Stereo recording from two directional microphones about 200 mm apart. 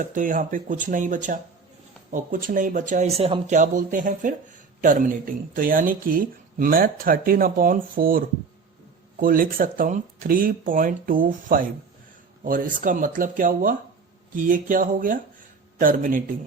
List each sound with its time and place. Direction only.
0.0 s speech: 40° right (ahead or behind)